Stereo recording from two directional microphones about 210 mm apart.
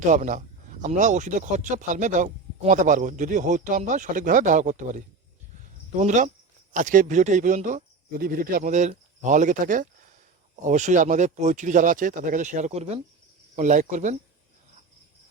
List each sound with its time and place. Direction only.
0.0 s speech: 35° right (ahead or behind)